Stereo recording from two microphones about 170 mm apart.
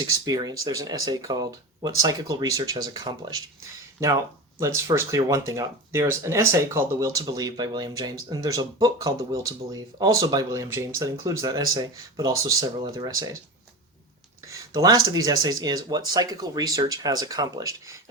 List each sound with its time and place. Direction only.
0.0 s speech: 20° right (ahead or behind)
14.4 s speech: 20° right (ahead or behind)